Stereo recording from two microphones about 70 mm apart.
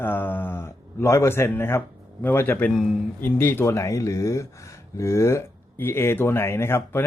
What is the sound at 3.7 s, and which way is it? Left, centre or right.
Speech, left.